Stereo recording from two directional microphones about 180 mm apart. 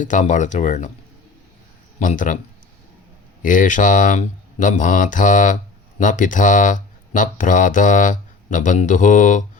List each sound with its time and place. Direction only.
0.0 s speech: 45° left (ahead or behind)
2.0 s speech: 45° left (ahead or behind)
3.4 s speech: 45° left (ahead or behind)